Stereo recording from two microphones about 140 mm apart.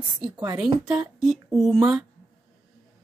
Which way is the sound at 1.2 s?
Centre (ahead or behind).